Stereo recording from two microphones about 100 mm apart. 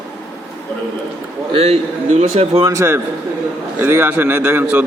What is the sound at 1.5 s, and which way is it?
Speech, 90° right.